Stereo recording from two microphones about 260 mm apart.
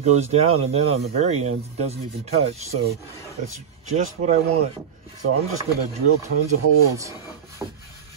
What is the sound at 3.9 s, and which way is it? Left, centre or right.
Speech, right.